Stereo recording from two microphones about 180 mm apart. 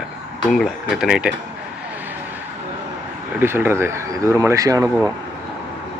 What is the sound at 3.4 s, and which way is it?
Speech, 15° right (ahead or behind).